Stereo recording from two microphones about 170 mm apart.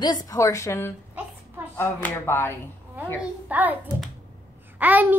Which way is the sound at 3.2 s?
10° right (ahead or behind).